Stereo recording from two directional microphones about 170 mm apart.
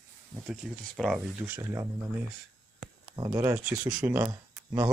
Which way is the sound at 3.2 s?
20° right (ahead or behind).